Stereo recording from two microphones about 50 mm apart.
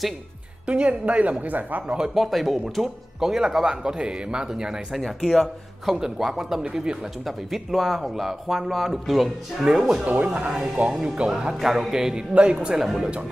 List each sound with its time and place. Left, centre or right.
0.7 s a man's voice: right
2.1 s speech: centre
4.9 s speech: centre
5.9 s speech: centre
7.2 s speech: centre
10.0 s a man's voice: right
10.5 s speech: centre